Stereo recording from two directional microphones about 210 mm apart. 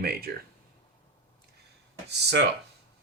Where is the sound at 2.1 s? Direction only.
55° right (ahead or behind).